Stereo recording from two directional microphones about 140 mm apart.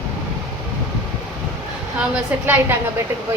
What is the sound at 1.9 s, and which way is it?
Speech, 10° right (ahead or behind).